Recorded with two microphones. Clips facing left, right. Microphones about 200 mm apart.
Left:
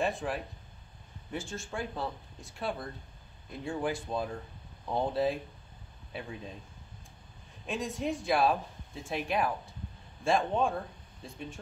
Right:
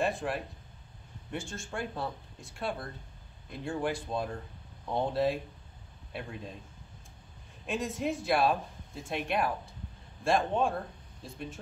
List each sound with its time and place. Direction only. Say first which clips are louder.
0.0 s speech: right 1 dB; centre (ahead or behind)
7.6 s speech: right 1 dB; centre (ahead or behind)